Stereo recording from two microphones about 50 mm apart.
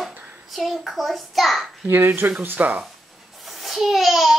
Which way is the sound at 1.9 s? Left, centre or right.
Right.